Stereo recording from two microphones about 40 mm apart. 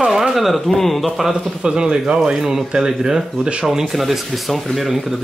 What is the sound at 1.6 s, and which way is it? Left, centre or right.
Speech, right.